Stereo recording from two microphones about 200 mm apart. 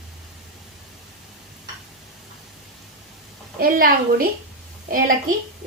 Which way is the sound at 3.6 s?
45° right (ahead or behind).